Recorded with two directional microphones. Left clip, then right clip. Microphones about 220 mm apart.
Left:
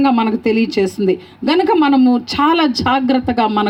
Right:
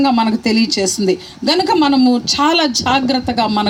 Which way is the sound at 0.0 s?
40° right (ahead or behind).